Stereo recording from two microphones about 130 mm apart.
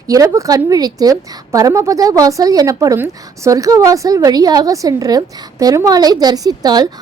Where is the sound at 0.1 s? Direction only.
25° right (ahead or behind).